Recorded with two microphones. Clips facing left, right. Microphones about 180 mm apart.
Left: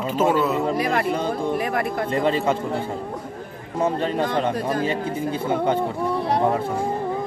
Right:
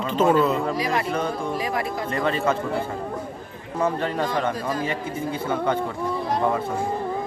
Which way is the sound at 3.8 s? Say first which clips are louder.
Left 2 dB; 25° left (ahead or behind).